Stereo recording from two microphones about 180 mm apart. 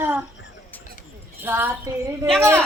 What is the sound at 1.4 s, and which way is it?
Speech, 10° right (ahead or behind).